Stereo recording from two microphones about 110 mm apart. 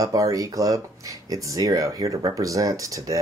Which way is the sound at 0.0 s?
30° right (ahead or behind).